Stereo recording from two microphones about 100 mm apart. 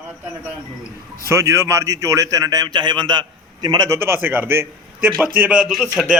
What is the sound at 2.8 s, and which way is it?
A man's voice, 50° right (ahead or behind).